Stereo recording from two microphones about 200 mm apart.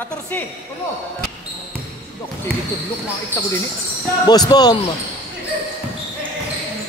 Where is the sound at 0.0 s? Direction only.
10° left (ahead or behind).